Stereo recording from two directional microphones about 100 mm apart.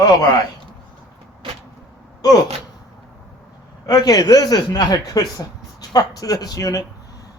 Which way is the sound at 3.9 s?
40° left (ahead or behind).